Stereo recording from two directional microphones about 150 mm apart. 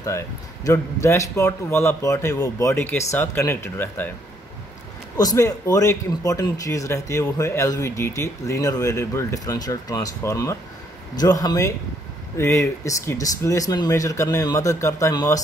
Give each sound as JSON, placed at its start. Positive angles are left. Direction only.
{"t": 0.7, "sound": "a man's voice", "side_deg": 20}
{"t": 5.1, "sound": "speech", "side_deg": 25}